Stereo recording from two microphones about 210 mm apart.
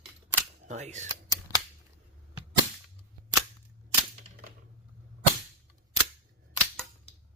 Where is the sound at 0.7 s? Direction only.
35° right (ahead or behind).